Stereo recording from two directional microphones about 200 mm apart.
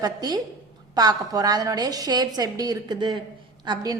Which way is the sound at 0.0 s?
20° right (ahead or behind).